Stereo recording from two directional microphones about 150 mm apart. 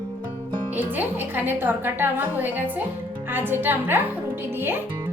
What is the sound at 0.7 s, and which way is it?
A woman's voice, 15° right (ahead or behind).